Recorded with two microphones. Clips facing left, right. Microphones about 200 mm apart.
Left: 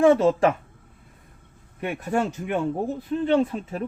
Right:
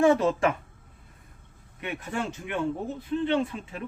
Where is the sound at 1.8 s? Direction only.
45° left (ahead or behind).